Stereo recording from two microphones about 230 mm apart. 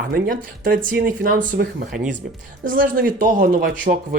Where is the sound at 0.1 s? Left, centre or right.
Right.